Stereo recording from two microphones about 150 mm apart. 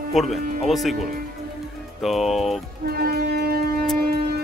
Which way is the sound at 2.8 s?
90° right.